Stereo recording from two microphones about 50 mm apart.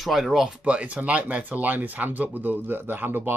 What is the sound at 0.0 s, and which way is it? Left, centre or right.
Speech, centre.